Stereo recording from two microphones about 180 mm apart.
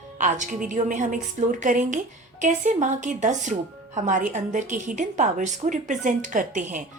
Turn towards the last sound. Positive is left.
turn(degrees=-45)  # may be behind; listen again after turning